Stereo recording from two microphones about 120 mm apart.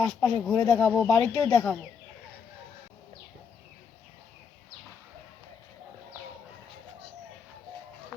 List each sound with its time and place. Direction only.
0.2 s speech: 10° left (ahead or behind)